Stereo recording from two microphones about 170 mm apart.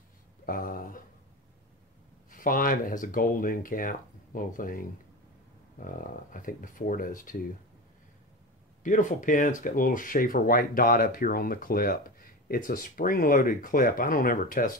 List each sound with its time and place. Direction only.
0.5 s a sound: 55° left (ahead or behind)
2.3 s speech: 55° left (ahead or behind)
8.8 s speech: 50° left (ahead or behind)